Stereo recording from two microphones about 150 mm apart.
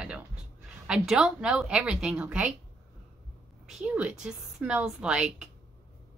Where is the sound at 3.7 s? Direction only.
5° right (ahead or behind).